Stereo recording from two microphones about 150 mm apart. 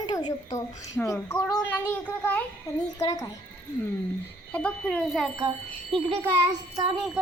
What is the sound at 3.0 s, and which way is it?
Speech, 25° left (ahead or behind).